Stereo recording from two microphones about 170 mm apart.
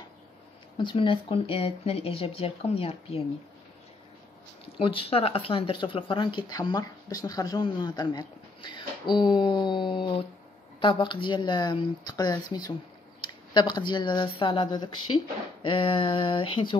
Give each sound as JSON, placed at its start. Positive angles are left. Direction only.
{"t": 0.7, "sound": "speech", "side_deg": 30}
{"t": 4.7, "sound": "speech", "side_deg": 30}